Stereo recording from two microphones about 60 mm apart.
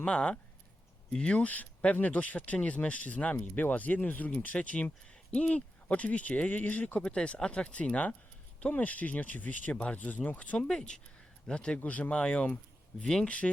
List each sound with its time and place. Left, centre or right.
0.0 s speech: centre